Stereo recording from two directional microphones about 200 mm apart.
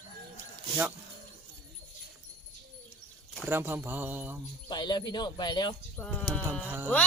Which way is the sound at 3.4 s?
10° right (ahead or behind).